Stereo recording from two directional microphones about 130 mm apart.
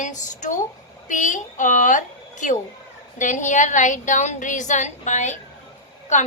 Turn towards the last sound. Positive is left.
turn(degrees=65)  # may be behind; listen again after turning